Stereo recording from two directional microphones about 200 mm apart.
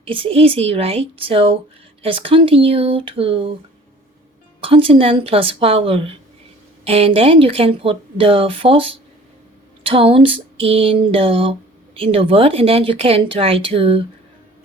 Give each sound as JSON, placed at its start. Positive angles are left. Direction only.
{"t": 0.0, "sound": "speech", "side_deg": -25}
{"t": 4.6, "sound": "speech", "side_deg": -25}